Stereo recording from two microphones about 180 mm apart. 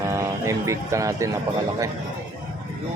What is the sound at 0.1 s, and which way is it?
Speech, 15° right (ahead or behind).